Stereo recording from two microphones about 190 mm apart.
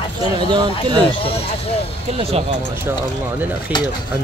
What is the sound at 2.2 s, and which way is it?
Speech, 30° right (ahead or behind).